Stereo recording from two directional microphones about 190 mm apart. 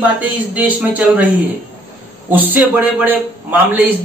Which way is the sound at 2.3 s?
10° right (ahead or behind).